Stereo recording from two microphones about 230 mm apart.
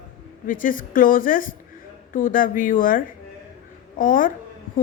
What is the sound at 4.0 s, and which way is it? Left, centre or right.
Speech, left.